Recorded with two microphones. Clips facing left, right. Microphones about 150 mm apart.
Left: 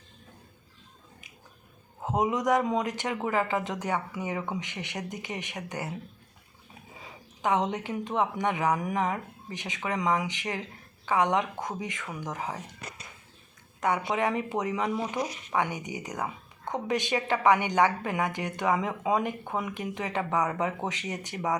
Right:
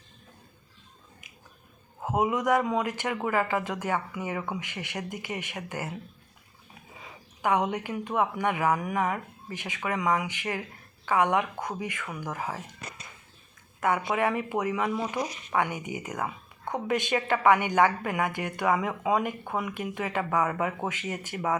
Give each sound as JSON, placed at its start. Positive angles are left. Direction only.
{"t": 2.0, "sound": "speech", "side_deg": 20}
{"t": 7.4, "sound": "speech", "side_deg": 20}
{"t": 13.8, "sound": "speech", "side_deg": 20}